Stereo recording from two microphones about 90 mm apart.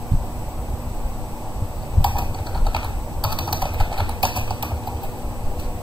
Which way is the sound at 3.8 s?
60° right (ahead or behind).